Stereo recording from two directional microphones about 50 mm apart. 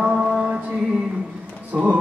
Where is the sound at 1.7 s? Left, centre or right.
Centre.